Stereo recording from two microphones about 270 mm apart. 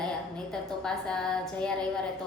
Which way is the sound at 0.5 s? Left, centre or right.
Centre.